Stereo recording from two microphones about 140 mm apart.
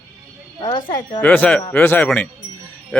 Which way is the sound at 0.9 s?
35° left (ahead or behind).